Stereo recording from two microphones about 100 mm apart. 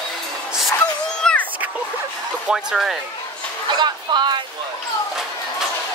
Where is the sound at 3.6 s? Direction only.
45° right (ahead or behind).